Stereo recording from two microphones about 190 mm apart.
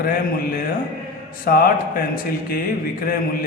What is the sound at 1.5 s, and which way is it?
Speech, 50° left (ahead or behind).